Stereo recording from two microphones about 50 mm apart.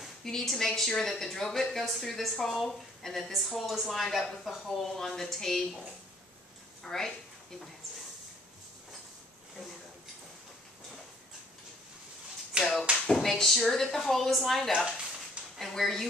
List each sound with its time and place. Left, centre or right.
0.2 s a woman's voice: centre
6.8 s speech: centre
12.5 s a sound: right
12.9 s a woman's voice: centre